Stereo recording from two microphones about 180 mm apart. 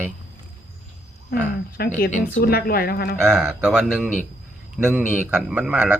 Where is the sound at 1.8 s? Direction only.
50° left (ahead or behind).